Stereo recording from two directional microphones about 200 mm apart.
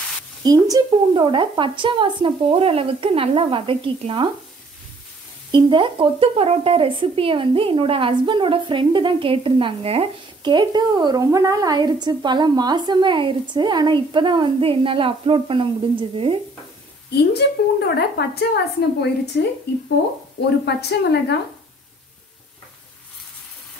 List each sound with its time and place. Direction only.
0.4 s speech: 20° right (ahead or behind)
5.5 s speech: 25° right (ahead or behind)
17.2 s a woman's voice: 55° left (ahead or behind)
20.6 s a woman's voice: 55° left (ahead or behind)